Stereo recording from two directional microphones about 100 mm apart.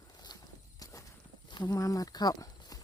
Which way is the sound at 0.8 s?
40° left (ahead or behind).